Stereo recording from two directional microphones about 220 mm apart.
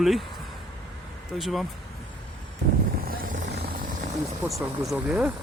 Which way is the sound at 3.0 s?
40° right (ahead or behind).